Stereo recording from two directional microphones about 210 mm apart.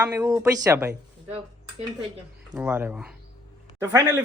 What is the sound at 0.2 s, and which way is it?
Speech, 15° right (ahead or behind).